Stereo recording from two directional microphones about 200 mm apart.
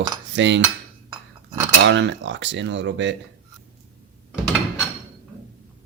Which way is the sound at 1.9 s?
65° right (ahead or behind).